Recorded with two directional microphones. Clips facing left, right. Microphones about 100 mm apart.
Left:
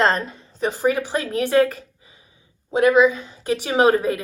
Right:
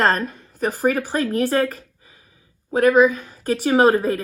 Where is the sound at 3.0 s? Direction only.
25° left (ahead or behind).